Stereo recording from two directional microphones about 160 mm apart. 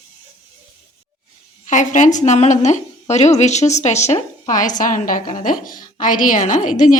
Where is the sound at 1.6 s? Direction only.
50° left (ahead or behind).